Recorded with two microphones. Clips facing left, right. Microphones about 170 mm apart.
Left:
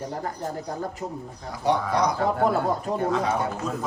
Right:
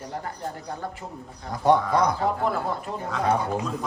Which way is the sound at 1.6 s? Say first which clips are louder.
Right 3 dB; 55° right (ahead or behind).